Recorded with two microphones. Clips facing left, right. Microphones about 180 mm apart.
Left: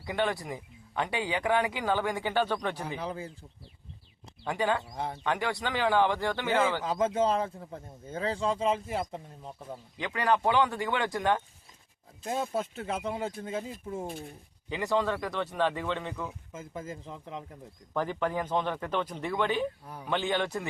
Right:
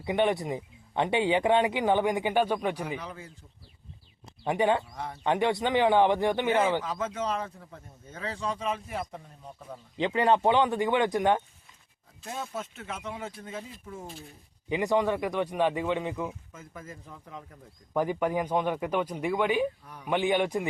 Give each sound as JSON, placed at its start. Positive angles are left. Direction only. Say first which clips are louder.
{"t": 0.0, "sound": "speech", "louder": "right 4 dB", "side_deg": -20}
{"t": 3.0, "sound": "speech", "louder": "left 6 dB", "side_deg": 30}
{"t": 4.4, "sound": "speech", "louder": "right 4 dB", "side_deg": -20}
{"t": 4.9, "sound": "speech", "louder": "left 3 dB", "side_deg": 25}
{"t": 5.2, "sound": "speech", "louder": "right 6 dB", "side_deg": -20}
{"t": 6.8, "sound": "speech", "louder": "left 5 dB", "side_deg": 30}
{"t": 10.0, "sound": "speech", "louder": "right 4 dB", "side_deg": -25}
{"t": 12.2, "sound": "speech", "louder": "left 5 dB", "side_deg": 30}
{"t": 14.1, "sound": "speech", "louder": "left 5 dB", "side_deg": 55}
{"t": 14.7, "sound": "speech", "louder": "right 3 dB", "side_deg": -20}
{"t": 16.5, "sound": "speech", "louder": "left 5 dB", "side_deg": 25}
{"t": 17.9, "sound": "speech", "louder": "right 3 dB", "side_deg": -15}
{"t": 19.8, "sound": "speech", "louder": "left 4 dB", "side_deg": 30}
{"t": 20.1, "sound": "speech", "louder": "right 4 dB", "side_deg": -15}